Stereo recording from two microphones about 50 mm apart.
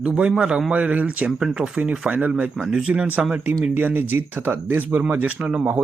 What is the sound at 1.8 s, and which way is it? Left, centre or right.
Speech, right.